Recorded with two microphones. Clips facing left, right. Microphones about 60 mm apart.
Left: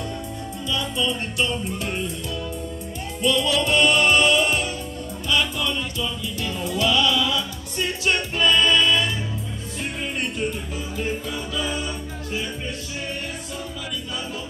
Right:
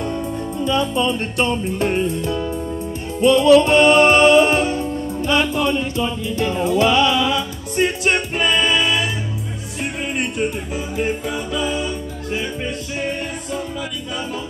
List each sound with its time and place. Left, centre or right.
0.7 s music: right; by 9.1 s centre
10.1 s music: right
11.0 s music: right